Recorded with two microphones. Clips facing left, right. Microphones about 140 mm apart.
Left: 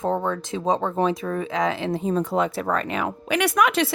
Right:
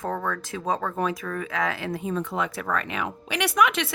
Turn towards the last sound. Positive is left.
turn(degrees=40)  # may be behind; listen again after turning